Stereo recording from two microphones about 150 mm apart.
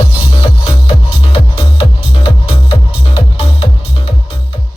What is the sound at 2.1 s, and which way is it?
Music, 40° left (ahead or behind).